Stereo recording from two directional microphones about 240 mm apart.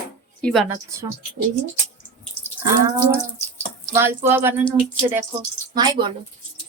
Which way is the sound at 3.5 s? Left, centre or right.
Centre.